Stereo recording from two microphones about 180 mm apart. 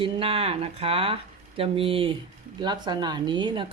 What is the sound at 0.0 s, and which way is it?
A woman's voice, 30° right (ahead or behind).